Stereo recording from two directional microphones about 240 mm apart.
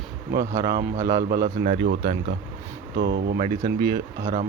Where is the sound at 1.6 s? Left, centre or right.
Right.